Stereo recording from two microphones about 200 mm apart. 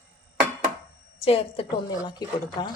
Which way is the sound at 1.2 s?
30° left (ahead or behind).